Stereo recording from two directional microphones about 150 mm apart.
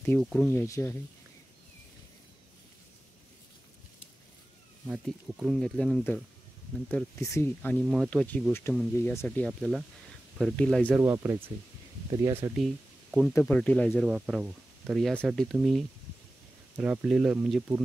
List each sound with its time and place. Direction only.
0.2 s speech: 5° left (ahead or behind)
4.8 s speech: 5° right (ahead or behind)
7.2 s speech: 20° left (ahead or behind)
7.8 s speech: 5° right (ahead or behind)
8.1 s speech: 5° left (ahead or behind)
9.6 s speech: centre (ahead or behind)
10.9 s speech: 15° right (ahead or behind)
12.5 s speech: centre (ahead or behind)
13.3 s speech: 10° left (ahead or behind)
14.0 s speech: 5° right (ahead or behind)